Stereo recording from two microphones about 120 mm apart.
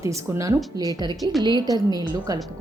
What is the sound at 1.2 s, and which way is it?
Speech, centre (ahead or behind).